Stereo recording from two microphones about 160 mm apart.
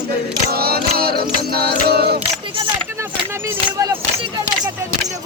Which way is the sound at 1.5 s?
80° right.